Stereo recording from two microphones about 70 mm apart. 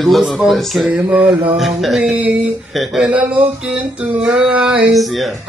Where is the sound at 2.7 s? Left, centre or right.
Centre.